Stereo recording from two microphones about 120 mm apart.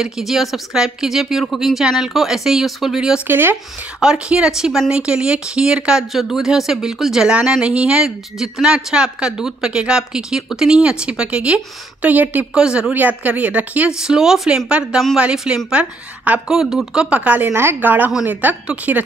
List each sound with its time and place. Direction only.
0.0 s speech: centre (ahead or behind)
3.3 s speech: 15° right (ahead or behind)
4.0 s speech: 5° right (ahead or behind)